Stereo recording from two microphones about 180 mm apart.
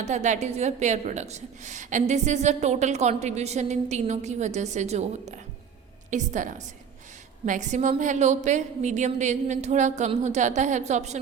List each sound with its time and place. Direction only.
0.0 s a woman's voice: 40° right (ahead or behind)
6.1 s a woman's voice: 45° right (ahead or behind)